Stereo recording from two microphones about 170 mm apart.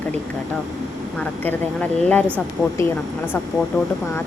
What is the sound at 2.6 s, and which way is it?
Speech, 20° left (ahead or behind).